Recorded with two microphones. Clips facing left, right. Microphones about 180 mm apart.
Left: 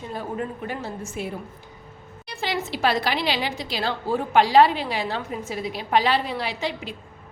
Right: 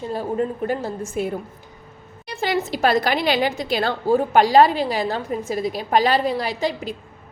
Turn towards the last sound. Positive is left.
turn(degrees=-40)  # may be behind; listen again after turning